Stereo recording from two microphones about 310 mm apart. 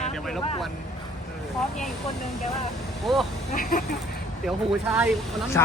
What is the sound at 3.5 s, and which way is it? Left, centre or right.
Speech, left.